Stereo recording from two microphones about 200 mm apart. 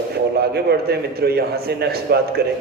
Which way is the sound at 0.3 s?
55° right (ahead or behind).